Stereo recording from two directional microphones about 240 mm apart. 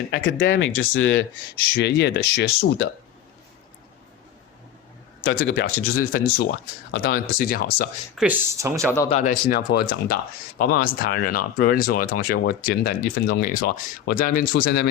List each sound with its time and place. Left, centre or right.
0.1 s speech: left
5.2 s speech: left
5.7 s speech: left
6.4 s speech: left
8.2 s speech: centre
8.5 s speech: centre
9.0 s speech: left
10.7 s speech: left
11.0 s speech: left